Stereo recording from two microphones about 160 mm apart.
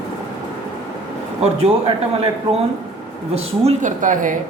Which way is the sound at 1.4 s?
40° right (ahead or behind).